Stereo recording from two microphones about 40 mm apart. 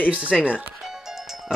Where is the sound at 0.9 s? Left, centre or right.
Centre.